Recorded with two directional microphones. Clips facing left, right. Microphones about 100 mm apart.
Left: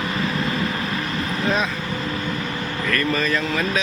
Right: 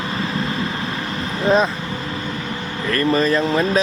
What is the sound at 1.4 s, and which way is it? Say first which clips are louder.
Speech: right 7 dB; 30° right (ahead or behind).